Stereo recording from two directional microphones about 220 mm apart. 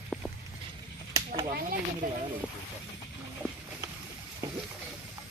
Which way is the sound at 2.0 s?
40° right (ahead or behind).